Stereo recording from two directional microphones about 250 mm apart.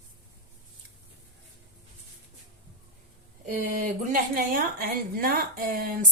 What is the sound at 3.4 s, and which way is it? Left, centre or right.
A woman's voice, right.